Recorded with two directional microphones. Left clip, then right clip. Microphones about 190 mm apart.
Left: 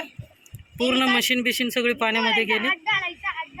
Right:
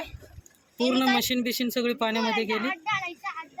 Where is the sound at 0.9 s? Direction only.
Centre (ahead or behind).